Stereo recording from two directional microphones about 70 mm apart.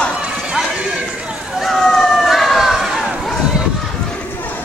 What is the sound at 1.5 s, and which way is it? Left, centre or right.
Run, centre.